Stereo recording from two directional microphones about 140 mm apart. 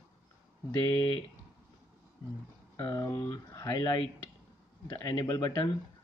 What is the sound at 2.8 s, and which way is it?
Speech, 25° left (ahead or behind).